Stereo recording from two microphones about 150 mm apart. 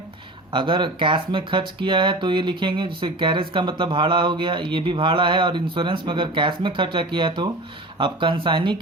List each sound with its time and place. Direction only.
0.5 s speech: 35° right (ahead or behind)